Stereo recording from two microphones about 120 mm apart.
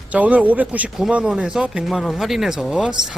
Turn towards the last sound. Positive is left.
turn(degrees=-5)  # may be behind; listen again after turning